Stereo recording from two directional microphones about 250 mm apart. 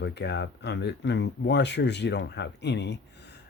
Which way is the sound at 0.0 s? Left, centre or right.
Left.